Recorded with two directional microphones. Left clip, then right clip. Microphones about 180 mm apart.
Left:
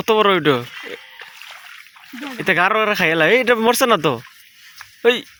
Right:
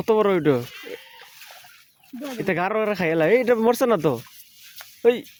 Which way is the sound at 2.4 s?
Centre (ahead or behind).